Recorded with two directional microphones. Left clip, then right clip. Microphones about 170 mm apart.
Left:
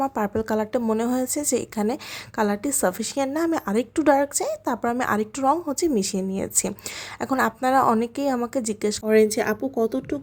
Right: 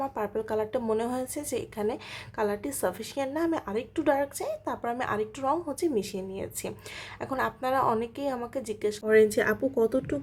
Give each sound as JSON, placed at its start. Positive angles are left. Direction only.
{"t": 0.0, "sound": "a woman's voice", "side_deg": 25}